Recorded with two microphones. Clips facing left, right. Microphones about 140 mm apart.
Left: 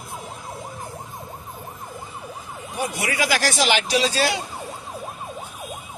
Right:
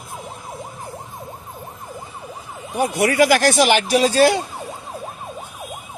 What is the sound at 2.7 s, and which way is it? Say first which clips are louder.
Speech: right 9 dB; 55° right (ahead or behind).